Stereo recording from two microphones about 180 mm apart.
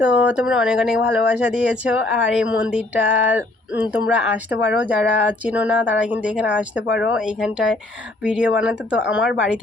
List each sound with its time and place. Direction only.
0.0 s speech: 5° right (ahead or behind)
6.8 s speech: 70° left (ahead or behind)
7.1 s speech: 5° right (ahead or behind)